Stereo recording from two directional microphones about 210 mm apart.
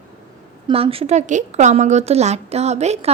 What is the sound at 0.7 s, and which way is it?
A woman's voice, 25° right (ahead or behind).